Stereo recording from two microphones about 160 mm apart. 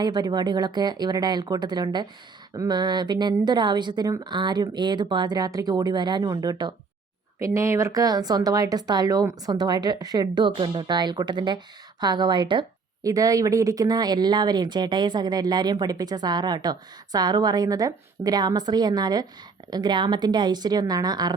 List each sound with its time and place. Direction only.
0.0 s speech: 25° right (ahead or behind)